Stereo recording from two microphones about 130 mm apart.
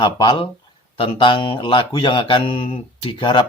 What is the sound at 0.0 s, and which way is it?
Speech, 35° left (ahead or behind).